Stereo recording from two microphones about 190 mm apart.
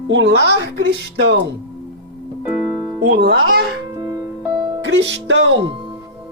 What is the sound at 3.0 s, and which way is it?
Speech, 50° right (ahead or behind).